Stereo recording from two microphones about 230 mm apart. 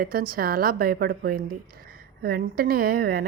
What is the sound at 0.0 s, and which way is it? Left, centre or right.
A woman's voice, right.